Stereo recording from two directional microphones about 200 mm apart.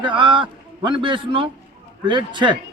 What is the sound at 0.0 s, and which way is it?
Speech, 25° right (ahead or behind).